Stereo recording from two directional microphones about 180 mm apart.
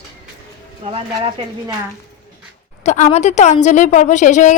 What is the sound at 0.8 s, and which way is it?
Speech, 30° right (ahead or behind).